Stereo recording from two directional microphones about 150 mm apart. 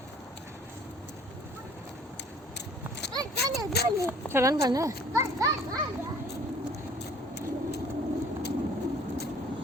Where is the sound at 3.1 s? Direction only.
25° right (ahead or behind).